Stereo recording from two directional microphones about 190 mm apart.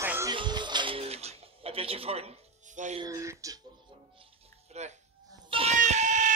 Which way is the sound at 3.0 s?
15° right (ahead or behind).